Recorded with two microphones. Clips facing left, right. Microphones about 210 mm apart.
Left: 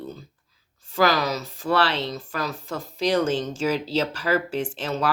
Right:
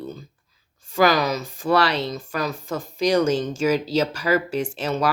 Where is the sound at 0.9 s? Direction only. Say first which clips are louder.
Right 3 dB; 15° right (ahead or behind).